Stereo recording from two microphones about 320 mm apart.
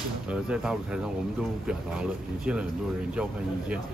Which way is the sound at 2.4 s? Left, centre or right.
Centre.